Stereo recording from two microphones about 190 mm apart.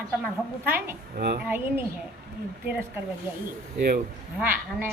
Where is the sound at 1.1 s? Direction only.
55° right (ahead or behind).